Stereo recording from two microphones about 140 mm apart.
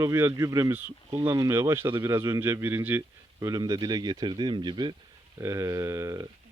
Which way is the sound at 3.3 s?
25° right (ahead or behind).